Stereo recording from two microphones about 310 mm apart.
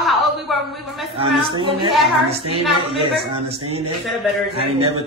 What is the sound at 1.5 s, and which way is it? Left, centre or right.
Speech, centre.